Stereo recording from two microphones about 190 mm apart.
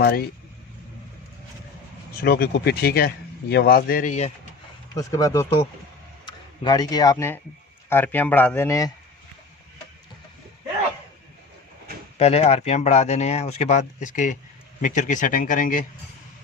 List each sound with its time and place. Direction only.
0.0 s speech: 55° left (ahead or behind)
2.2 s speech: 55° left (ahead or behind); by 4.3 s 40° left (ahead or behind)
4.9 s speech: 15° left (ahead or behind)
12.1 s speech: 35° left (ahead or behind)